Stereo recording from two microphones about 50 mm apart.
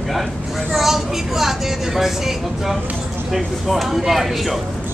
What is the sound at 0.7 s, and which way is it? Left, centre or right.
Speech, centre.